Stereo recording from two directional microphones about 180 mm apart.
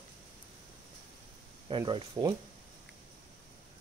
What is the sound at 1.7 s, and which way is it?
Speech, 25° right (ahead or behind).